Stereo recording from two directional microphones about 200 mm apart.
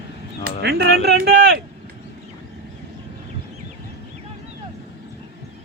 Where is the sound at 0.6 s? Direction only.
50° right (ahead or behind).